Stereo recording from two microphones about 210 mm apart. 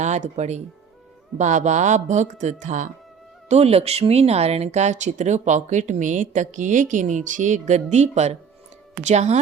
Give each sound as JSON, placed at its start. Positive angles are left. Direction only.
{"t": 0.0, "sound": "speech", "side_deg": -35}